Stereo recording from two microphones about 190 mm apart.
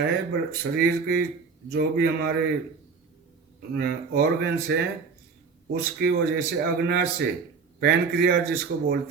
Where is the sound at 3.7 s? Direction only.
55° right (ahead or behind).